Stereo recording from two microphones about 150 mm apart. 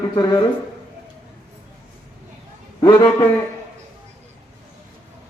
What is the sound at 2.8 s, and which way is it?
Speech, 30° left (ahead or behind).